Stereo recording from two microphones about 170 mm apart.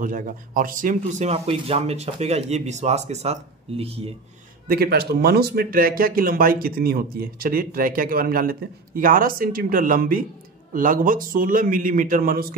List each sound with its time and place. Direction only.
0.0 s speech: 50° right (ahead or behind); by 4.1 s 35° right (ahead or behind)
4.6 s a man's voice: 65° right (ahead or behind)